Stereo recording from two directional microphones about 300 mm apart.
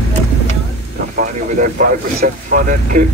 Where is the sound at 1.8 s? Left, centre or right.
Right.